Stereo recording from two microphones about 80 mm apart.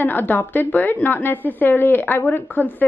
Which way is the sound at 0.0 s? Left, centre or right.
Left.